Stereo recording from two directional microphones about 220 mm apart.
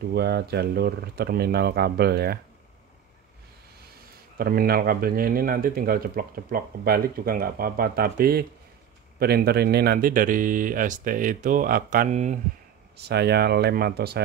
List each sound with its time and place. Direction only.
0.1 s speech: 45° right (ahead or behind)
4.4 s speech: 40° right (ahead or behind)
12.9 s speech: 45° right (ahead or behind)